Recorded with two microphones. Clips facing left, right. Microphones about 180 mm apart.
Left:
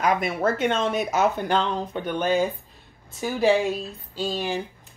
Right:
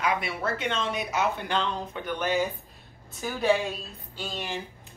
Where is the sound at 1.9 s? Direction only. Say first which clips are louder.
Left 5 dB; 30° left (ahead or behind).